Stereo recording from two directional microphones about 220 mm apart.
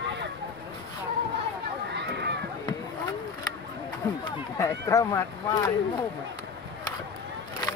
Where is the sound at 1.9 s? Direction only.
50° right (ahead or behind).